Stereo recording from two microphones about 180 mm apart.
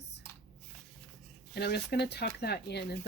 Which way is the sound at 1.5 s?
65° left (ahead or behind).